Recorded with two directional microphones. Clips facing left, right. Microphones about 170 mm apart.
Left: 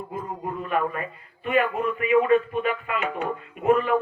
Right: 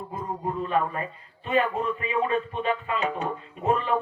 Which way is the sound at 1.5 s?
30° right (ahead or behind).